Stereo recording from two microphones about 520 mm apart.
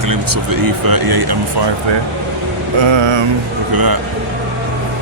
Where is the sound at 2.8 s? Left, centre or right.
Right.